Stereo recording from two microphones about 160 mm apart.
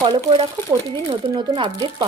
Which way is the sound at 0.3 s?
30° right (ahead or behind).